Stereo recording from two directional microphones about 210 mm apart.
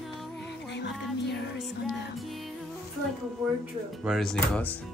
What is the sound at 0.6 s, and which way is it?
Music, 55° left (ahead or behind).